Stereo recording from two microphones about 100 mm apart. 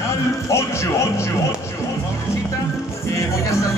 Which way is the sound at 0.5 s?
30° left (ahead or behind).